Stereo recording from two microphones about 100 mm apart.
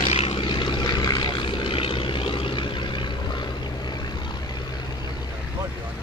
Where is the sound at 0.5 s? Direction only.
55° left (ahead or behind).